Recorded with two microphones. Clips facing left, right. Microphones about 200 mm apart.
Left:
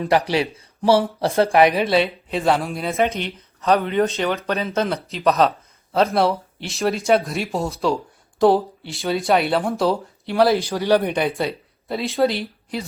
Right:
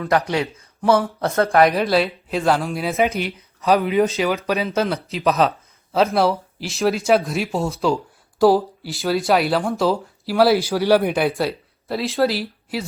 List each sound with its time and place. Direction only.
0.3 s a man's voice: 30° left (ahead or behind)
1.5 s speech: centre (ahead or behind)